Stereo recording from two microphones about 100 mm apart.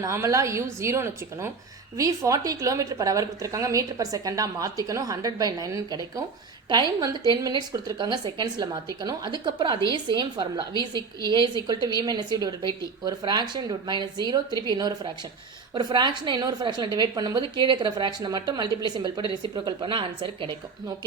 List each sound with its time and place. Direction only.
0.0 s a woman's voice: 30° right (ahead or behind); by 20.6 s 60° right (ahead or behind)